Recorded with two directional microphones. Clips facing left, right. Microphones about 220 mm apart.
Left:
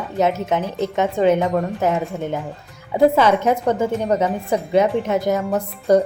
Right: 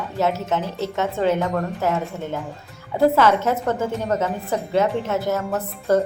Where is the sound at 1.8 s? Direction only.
15° left (ahead or behind).